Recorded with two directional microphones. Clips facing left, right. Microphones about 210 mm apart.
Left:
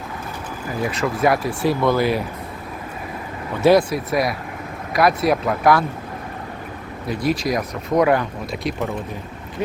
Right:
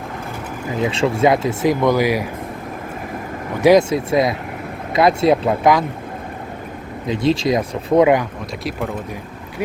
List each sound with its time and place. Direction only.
0.8 s speech: 25° right (ahead or behind)
3.6 s speech: 15° right (ahead or behind)
7.1 s speech: 25° right (ahead or behind)